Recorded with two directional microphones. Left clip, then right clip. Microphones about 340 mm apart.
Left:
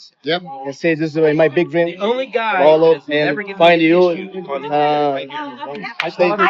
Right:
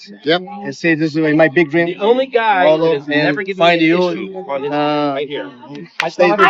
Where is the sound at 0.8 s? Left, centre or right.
Centre.